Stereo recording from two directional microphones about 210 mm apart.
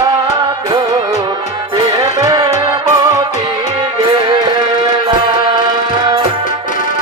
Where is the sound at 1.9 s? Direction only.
15° right (ahead or behind).